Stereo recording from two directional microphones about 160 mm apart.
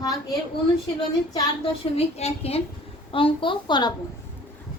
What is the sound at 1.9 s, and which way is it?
A woman's voice, 40° left (ahead or behind).